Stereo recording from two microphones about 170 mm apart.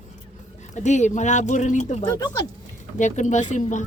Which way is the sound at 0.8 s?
45° left (ahead or behind).